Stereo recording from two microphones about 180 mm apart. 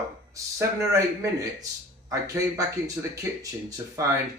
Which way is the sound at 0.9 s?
20° right (ahead or behind).